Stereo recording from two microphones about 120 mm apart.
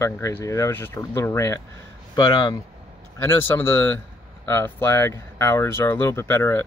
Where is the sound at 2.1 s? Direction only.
35° left (ahead or behind).